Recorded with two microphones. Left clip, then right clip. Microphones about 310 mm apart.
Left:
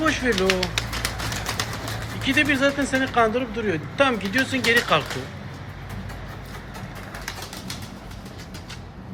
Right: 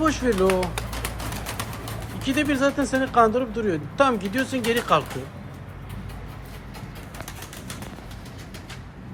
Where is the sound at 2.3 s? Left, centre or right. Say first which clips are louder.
Left 2 dB; centre.